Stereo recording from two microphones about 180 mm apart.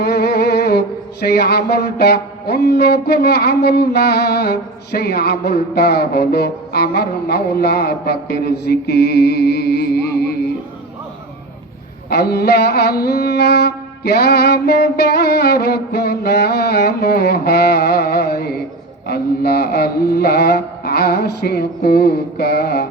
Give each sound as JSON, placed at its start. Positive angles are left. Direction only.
{"t": 0.0, "sound": "mantra", "side_deg": 60}
{"t": 12.1, "sound": "mantra", "side_deg": 60}